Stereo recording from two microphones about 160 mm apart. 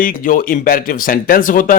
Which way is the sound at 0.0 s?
60° left (ahead or behind).